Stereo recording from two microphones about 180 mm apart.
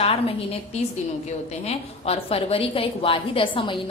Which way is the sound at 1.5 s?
35° left (ahead or behind).